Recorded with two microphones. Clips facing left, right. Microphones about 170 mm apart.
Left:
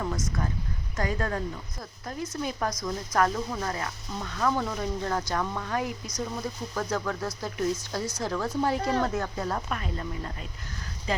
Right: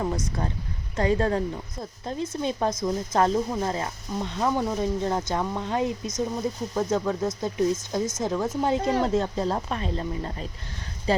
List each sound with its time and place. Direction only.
0.0 s speech: 30° right (ahead or behind)